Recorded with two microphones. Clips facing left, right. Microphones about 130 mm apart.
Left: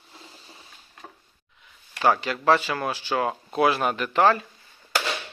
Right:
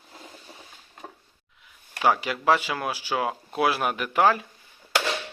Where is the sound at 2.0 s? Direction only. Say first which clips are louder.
Left 1 dB; 10° right (ahead or behind).